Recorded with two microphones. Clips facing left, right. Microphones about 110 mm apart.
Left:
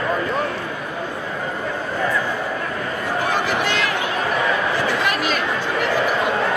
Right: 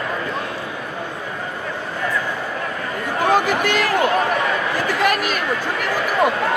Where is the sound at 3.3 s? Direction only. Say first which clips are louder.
Right 6 dB; 50° right (ahead or behind).